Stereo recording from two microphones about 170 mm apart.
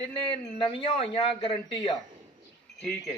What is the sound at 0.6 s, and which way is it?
Speech, 30° left (ahead or behind).